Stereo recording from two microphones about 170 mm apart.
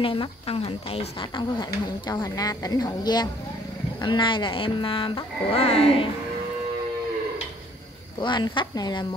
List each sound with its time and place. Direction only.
0.0 s speech: 30° left (ahead or behind)
8.2 s speech: 30° left (ahead or behind)